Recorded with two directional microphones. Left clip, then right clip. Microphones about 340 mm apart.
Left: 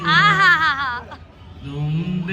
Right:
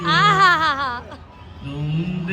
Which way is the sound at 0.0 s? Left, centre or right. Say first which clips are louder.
Left 2 dB; centre.